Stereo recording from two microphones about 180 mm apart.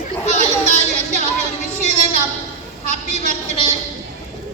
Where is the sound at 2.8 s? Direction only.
40° right (ahead or behind).